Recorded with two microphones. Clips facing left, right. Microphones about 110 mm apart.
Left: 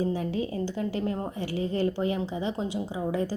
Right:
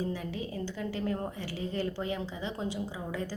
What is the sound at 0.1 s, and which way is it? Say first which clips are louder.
A woman's voice: left 7 dB; 25° left (ahead or behind).